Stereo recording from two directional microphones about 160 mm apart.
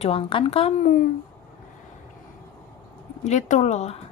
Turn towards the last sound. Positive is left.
turn(degrees=45)  # may be behind; listen again after turning